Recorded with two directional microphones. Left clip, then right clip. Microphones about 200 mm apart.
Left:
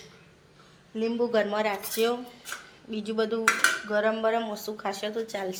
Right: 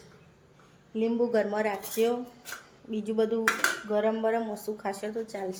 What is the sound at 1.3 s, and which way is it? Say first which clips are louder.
A woman's voice: left 2 dB; 15° right (ahead or behind).